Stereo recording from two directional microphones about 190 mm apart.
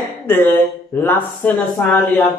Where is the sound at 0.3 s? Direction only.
10° left (ahead or behind).